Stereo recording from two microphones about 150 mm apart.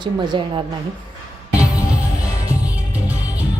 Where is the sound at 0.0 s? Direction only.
30° right (ahead or behind).